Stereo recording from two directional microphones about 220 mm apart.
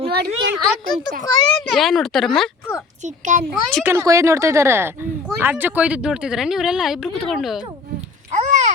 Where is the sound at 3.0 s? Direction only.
35° right (ahead or behind).